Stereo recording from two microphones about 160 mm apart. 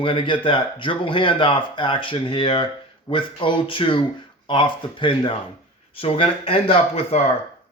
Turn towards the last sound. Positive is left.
turn(degrees=40)  # may be behind; listen again after turning